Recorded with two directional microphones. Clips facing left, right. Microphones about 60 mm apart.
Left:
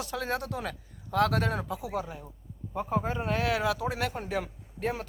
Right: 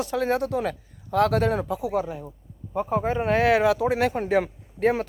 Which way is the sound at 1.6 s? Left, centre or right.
Right.